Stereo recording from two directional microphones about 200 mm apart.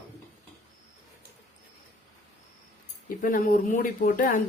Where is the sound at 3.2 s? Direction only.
40° left (ahead or behind).